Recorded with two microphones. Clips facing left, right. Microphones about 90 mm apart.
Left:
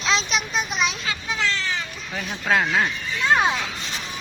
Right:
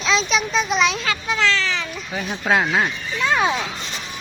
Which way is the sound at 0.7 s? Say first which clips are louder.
Right 6 dB; 90° right.